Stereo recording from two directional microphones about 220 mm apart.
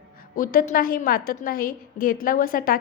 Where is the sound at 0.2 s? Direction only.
40° left (ahead or behind).